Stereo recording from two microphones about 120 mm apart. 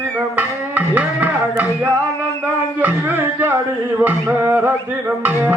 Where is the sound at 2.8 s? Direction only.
15° right (ahead or behind).